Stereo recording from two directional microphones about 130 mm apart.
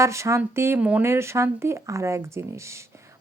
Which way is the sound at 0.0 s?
20° right (ahead or behind).